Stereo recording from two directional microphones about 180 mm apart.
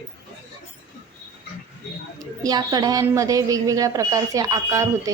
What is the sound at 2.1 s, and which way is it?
A woman's voice, 20° right (ahead or behind).